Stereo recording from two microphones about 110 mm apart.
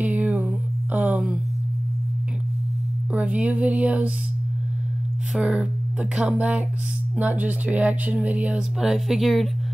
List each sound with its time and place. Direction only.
0.0 s a sound: 15° right (ahead or behind)
3.1 s music: 10° right (ahead or behind)
5.3 s speech: 5° right (ahead or behind)